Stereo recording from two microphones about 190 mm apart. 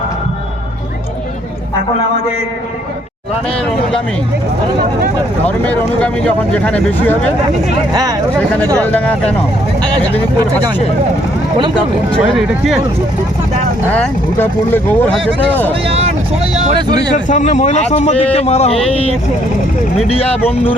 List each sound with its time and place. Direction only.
5.5 s speech: 5° left (ahead or behind)
8.4 s speech: 5° left (ahead or behind)
12.3 s speech: centre (ahead or behind)
13.9 s speech: 10° left (ahead or behind)
15.7 s speech: 30° right (ahead or behind)
17.2 s speech: 40° left (ahead or behind)